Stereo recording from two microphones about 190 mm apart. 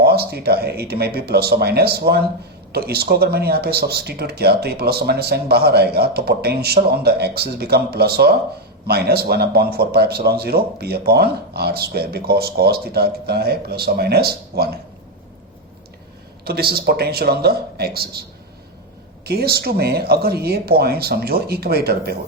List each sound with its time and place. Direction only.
0.0 s speech: 55° right (ahead or behind)
16.4 s speech: 55° right (ahead or behind)
19.2 s speech: 55° right (ahead or behind)